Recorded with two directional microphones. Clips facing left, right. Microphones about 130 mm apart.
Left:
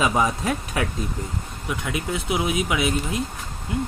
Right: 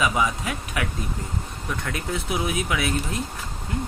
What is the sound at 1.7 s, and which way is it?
Speech, 10° left (ahead or behind).